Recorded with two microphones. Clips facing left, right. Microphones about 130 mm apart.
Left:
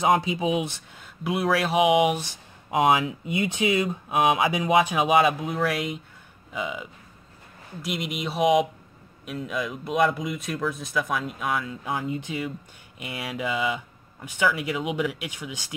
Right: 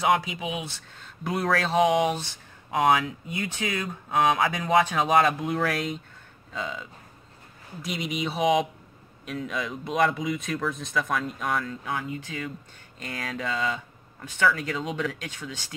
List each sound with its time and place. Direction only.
0.0 s speech: 25° left (ahead or behind)
0.6 s speech: 15° left (ahead or behind)
1.2 s speech: 5° left (ahead or behind)
6.5 s speech: 15° left (ahead or behind)
7.8 s speech: centre (ahead or behind)
11.8 s speech: 20° left (ahead or behind)